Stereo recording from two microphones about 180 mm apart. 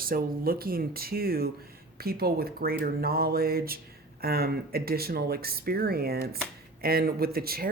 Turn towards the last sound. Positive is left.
turn(degrees=-55)  # may be behind; listen again after turning